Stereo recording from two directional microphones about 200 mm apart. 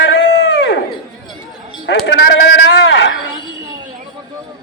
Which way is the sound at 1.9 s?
60° left (ahead or behind).